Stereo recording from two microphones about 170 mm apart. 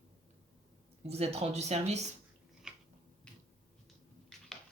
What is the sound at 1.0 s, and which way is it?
Speech, 40° right (ahead or behind).